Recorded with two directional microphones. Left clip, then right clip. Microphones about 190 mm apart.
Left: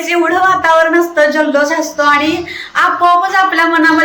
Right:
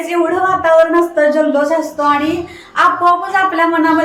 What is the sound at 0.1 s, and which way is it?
A man's voice, 5° right (ahead or behind).